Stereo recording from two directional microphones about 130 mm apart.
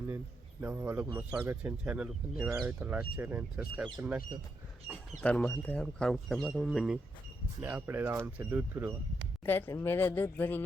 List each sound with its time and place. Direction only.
0.6 s speech: 15° right (ahead or behind)
5.2 s speech: 10° left (ahead or behind)
7.6 s speech: 15° right (ahead or behind)
9.5 s speech: 15° left (ahead or behind)